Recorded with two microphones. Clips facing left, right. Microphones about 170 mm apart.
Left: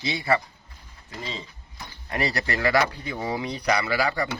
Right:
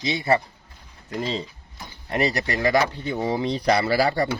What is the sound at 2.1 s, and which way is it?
Speech, 20° right (ahead or behind).